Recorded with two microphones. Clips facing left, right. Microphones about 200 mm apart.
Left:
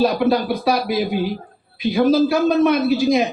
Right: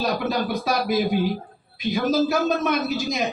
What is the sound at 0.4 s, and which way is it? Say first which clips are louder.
Speech: left 4 dB; 45° right (ahead or behind).